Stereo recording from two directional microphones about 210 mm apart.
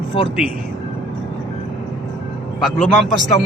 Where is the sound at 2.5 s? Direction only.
Centre (ahead or behind).